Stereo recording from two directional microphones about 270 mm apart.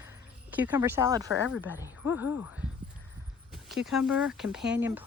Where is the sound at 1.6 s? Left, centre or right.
Centre.